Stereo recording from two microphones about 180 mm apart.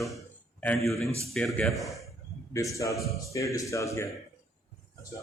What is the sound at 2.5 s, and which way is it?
A man's voice, 15° left (ahead or behind).